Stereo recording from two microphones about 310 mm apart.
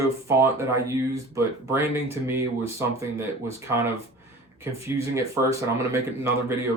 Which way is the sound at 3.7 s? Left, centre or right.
Centre.